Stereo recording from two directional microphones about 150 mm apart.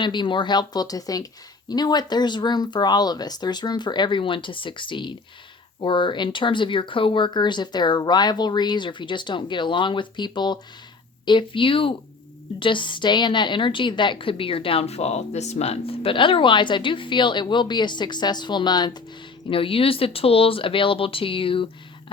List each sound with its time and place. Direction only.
0.0 s a woman's voice: 30° left (ahead or behind)